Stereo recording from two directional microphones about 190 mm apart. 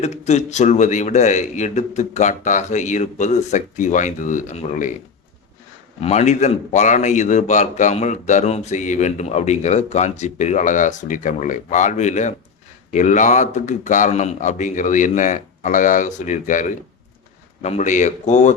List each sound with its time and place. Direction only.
0.0 s a man's voice: 35° left (ahead or behind)
6.0 s a man's voice: 35° left (ahead or behind)